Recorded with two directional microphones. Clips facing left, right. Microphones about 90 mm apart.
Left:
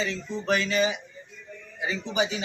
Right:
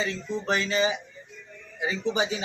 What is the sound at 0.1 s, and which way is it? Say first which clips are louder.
Speech: left 1 dB; 30° right (ahead or behind).